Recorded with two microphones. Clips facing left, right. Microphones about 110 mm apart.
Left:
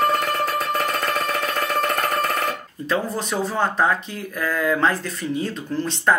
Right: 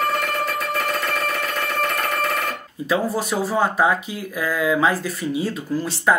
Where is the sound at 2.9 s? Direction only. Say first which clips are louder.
Right 2 dB; 10° right (ahead or behind).